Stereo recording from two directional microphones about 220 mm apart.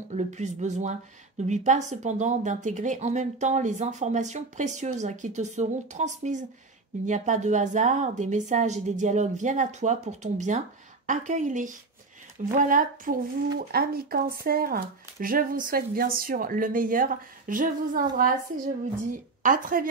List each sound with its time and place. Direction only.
0.1 s a woman's voice: 30° right (ahead or behind)
19.4 s a woman's voice: 40° right (ahead or behind)